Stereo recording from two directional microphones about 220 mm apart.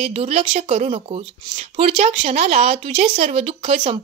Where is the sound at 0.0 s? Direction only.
30° right (ahead or behind).